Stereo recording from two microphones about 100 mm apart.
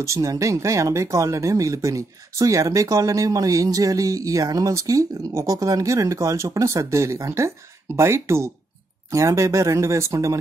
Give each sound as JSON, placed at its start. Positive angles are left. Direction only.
{"t": 0.0, "sound": "speech", "side_deg": -30}